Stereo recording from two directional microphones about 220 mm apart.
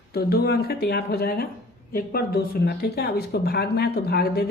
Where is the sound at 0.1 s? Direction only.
45° left (ahead or behind).